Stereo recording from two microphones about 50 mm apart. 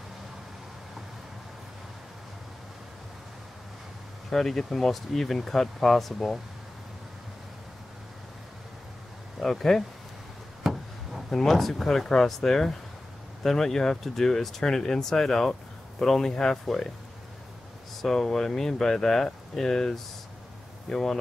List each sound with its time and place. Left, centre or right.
4.3 s speech: centre
9.4 s speech: centre
10.6 s a sound: centre
11.2 s speech: centre
18.0 s speech: centre